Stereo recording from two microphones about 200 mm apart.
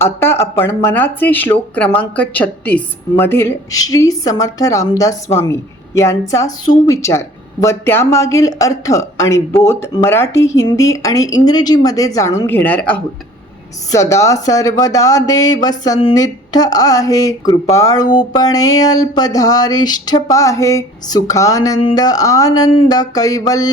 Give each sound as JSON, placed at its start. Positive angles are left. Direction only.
{"t": 0.0, "sound": "a woman's voice", "side_deg": 10}
{"t": 17.7, "sound": "a sound", "side_deg": 15}
{"t": 20.2, "sound": "a woman's voice", "side_deg": 15}